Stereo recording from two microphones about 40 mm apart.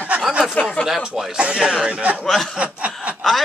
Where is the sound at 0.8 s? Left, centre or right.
Centre; by 2.2 s right.